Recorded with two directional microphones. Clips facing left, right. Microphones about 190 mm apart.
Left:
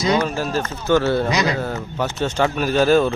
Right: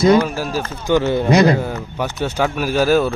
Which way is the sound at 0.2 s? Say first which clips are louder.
Right 2 dB; 10° right (ahead or behind).